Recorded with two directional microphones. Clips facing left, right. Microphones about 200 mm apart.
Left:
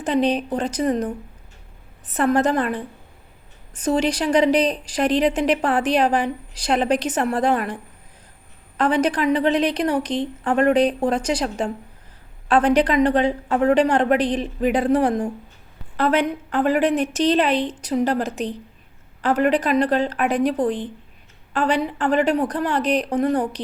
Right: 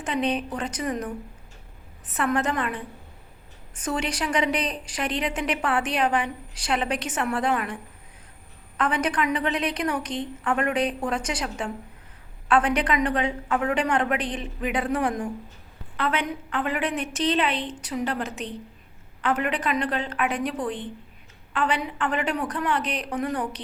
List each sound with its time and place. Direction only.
0.0 s a woman's voice: 35° left (ahead or behind)
2.1 s a woman's voice: 35° left (ahead or behind)
8.8 s a woman's voice: 35° left (ahead or behind)